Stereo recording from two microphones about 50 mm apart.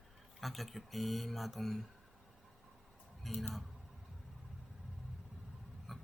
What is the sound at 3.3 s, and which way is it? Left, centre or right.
Speech, centre.